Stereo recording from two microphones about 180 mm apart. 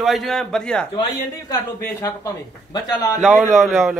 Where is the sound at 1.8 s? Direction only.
15° left (ahead or behind).